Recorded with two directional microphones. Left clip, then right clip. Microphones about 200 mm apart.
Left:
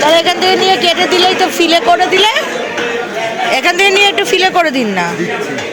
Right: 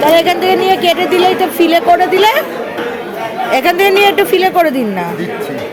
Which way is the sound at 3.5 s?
10° right (ahead or behind).